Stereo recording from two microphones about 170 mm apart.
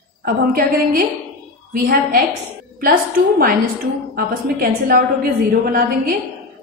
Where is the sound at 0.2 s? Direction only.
60° right (ahead or behind).